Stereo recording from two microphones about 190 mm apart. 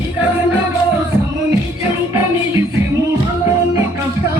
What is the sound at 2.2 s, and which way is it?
Music, 15° right (ahead or behind).